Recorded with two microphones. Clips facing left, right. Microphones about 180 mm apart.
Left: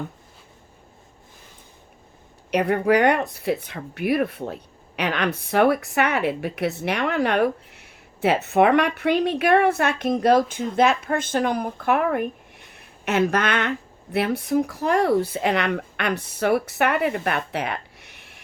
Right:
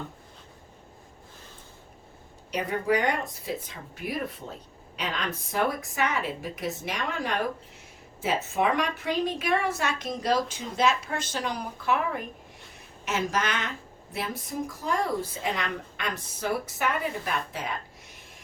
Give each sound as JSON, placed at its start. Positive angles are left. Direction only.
{"t": 2.5, "sound": "a woman's voice", "side_deg": 65}